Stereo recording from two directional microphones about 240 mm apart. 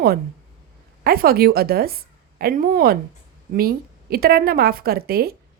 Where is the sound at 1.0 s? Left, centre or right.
Right.